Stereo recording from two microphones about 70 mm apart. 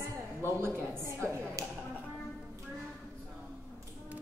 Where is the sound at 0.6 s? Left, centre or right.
Right.